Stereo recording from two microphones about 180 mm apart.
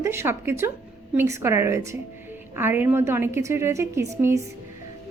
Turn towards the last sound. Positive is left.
turn(degrees=-15)  # may be behind; listen again after turning